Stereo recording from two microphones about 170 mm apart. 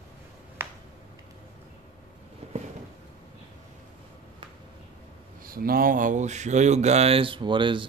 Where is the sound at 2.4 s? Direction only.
40° right (ahead or behind).